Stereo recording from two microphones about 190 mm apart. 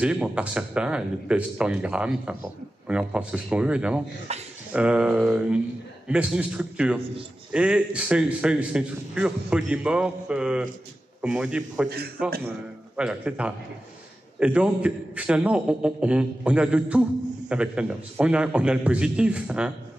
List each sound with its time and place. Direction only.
0.0 s speech: 5° right (ahead or behind)
4.3 s speech: 35° right (ahead or behind)
4.7 s speech: 5° right (ahead or behind)